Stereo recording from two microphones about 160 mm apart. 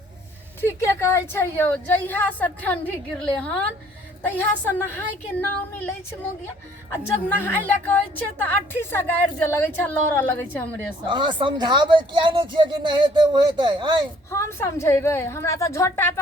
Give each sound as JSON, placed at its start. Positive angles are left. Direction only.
{"t": 0.6, "sound": "a woman's voice", "side_deg": 15}
{"t": 6.9, "sound": "a woman's voice", "side_deg": 15}
{"t": 11.1, "sound": "speech", "side_deg": -30}
{"t": 14.3, "sound": "a woman's voice", "side_deg": 20}